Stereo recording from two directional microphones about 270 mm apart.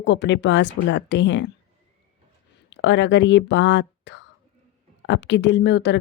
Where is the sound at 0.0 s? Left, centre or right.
Left.